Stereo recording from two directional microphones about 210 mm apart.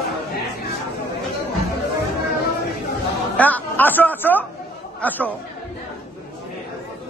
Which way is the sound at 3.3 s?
5° left (ahead or behind).